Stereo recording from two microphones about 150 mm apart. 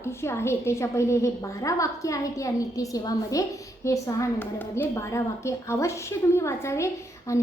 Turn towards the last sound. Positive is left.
turn(degrees=20)  # may be behind; listen again after turning